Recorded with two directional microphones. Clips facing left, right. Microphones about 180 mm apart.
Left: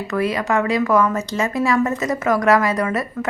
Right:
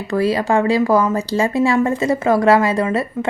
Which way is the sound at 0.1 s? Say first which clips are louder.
Right 4 dB; 30° right (ahead or behind).